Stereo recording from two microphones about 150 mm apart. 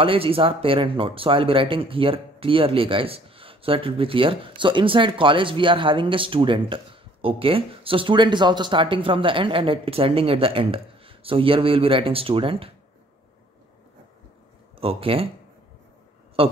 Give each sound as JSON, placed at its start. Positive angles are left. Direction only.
{"t": 0.0, "sound": "speech", "side_deg": -35}
{"t": 14.8, "sound": "speech", "side_deg": -40}
{"t": 16.4, "sound": "speech", "side_deg": -40}